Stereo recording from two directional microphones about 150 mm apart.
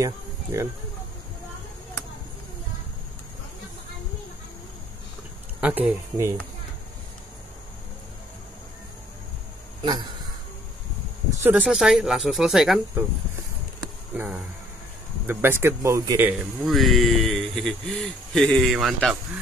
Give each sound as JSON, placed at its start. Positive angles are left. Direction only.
{"t": 0.0, "sound": "speech", "side_deg": -20}
{"t": 5.6, "sound": "speech", "side_deg": -10}
{"t": 9.8, "sound": "speech", "side_deg": -30}
{"t": 11.4, "sound": "a man's voice", "side_deg": -10}
{"t": 14.1, "sound": "speech", "side_deg": -10}
{"t": 16.6, "sound": "a man's voice", "side_deg": 0}